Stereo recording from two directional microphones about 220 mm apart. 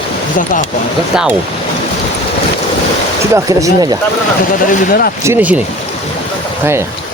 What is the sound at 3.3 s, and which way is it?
Speech, 15° right (ahead or behind).